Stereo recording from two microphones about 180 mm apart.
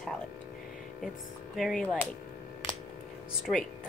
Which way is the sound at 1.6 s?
Centre (ahead or behind).